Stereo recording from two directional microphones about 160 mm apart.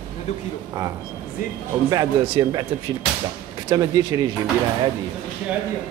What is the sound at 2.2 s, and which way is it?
Speech, 30° right (ahead or behind).